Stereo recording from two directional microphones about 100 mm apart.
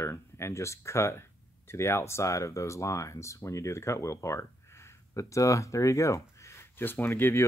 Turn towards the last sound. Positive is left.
turn(degrees=20)  # may be behind; listen again after turning